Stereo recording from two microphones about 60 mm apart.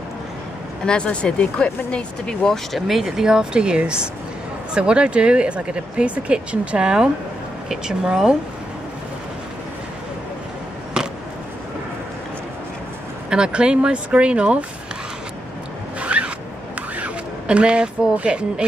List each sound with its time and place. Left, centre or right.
0.8 s speech: centre
10.9 s a sound: centre
13.3 s speech: centre
16.0 s zipper: centre
17.0 s speech: centre